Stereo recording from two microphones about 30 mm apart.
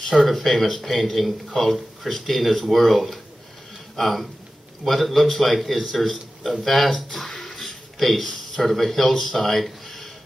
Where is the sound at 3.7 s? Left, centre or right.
Centre.